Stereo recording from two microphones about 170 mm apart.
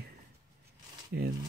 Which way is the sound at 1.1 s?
90° right.